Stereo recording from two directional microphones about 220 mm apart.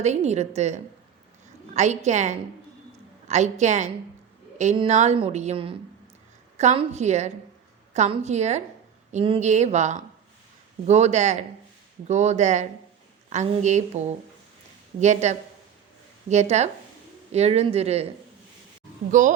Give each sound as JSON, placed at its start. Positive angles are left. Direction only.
{"t": 0.0, "sound": "a woman's voice", "side_deg": -30}
{"t": 15.0, "sound": "a woman's voice", "side_deg": -30}
{"t": 19.2, "sound": "a woman's voice", "side_deg": -35}